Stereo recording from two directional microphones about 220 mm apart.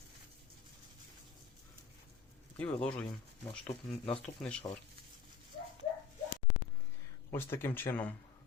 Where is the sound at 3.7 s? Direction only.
25° left (ahead or behind).